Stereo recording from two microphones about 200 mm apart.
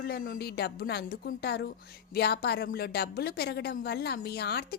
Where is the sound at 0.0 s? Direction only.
50° left (ahead or behind).